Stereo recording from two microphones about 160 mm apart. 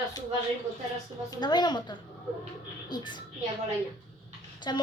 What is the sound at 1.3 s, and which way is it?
A child's voice, 25° left (ahead or behind).